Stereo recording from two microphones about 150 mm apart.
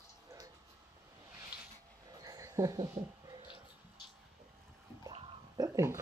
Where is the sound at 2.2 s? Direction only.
20° right (ahead or behind).